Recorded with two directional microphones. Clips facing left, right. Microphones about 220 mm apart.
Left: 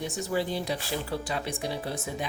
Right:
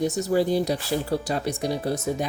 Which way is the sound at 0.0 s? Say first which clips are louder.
Right 8 dB; 40° right (ahead or behind).